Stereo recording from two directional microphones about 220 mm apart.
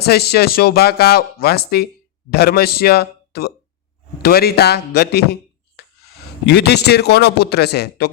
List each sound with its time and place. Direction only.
0.0 s speech: 45° left (ahead or behind)